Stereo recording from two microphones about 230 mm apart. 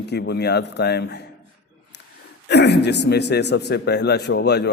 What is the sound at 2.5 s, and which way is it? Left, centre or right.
A man's voice, left.